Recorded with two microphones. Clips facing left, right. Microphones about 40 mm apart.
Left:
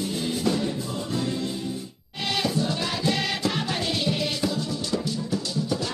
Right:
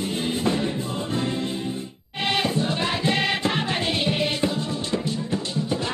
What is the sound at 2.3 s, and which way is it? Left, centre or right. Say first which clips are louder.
Music: right 2 dB; right.